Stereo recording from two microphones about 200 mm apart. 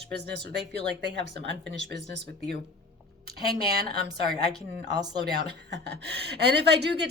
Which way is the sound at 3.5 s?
50° right (ahead or behind).